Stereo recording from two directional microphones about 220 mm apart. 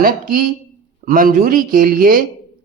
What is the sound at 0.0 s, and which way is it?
Speech, 40° right (ahead or behind).